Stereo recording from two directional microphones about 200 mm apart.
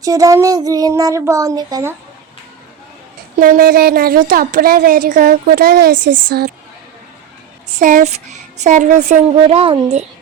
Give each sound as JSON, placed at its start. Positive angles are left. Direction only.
{"t": 0.0, "sound": "speech", "side_deg": -15}
{"t": 3.3, "sound": "a woman's voice", "side_deg": -45}
{"t": 7.8, "sound": "speech", "side_deg": -40}